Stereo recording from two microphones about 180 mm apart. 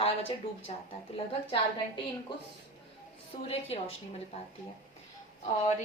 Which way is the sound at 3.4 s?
35° left (ahead or behind).